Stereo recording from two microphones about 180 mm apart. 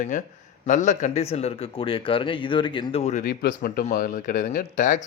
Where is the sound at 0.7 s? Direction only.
45° left (ahead or behind).